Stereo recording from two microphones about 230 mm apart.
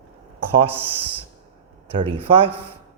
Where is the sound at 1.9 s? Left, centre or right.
Right.